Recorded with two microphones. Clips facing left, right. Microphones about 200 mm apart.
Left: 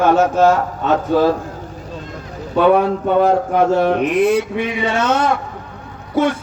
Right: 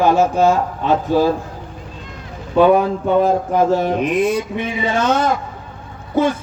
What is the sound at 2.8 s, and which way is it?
Speech, 70° left (ahead or behind).